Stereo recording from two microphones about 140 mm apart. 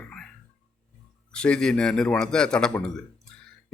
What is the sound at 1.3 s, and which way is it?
A man's voice, 5° left (ahead or behind).